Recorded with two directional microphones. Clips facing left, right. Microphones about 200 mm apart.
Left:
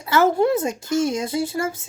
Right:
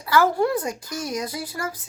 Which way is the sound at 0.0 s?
25° left (ahead or behind).